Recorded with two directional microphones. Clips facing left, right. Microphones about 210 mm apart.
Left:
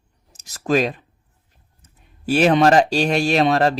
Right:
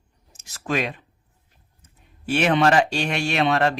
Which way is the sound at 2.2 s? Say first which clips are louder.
Left 4 dB; 35° left (ahead or behind).